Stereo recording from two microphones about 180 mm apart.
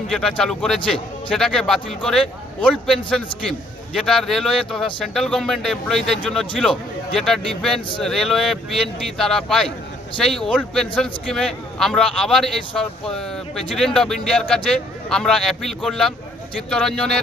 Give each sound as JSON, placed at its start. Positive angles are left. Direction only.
{"t": 0.1, "sound": "a man's voice", "side_deg": 5}